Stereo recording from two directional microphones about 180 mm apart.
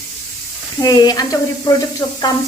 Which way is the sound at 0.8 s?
20° left (ahead or behind).